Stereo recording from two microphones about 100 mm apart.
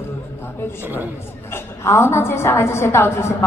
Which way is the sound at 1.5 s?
25° left (ahead or behind).